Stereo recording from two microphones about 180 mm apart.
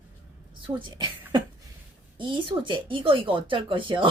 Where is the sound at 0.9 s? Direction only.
25° right (ahead or behind).